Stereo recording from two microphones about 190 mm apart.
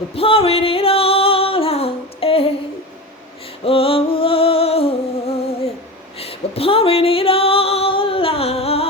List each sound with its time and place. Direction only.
0.1 s singing: 30° left (ahead or behind)
3.6 s a sound: 30° left (ahead or behind)
6.1 s female singing: 30° left (ahead or behind)